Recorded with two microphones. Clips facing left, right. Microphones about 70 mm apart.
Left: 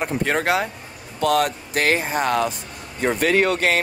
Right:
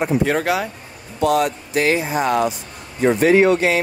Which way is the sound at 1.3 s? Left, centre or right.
Left.